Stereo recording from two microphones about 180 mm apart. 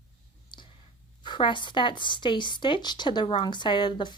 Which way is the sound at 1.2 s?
25° left (ahead or behind).